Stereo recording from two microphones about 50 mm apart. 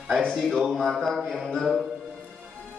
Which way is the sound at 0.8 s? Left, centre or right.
Centre.